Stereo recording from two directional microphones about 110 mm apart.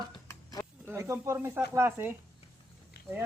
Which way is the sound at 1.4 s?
20° right (ahead or behind).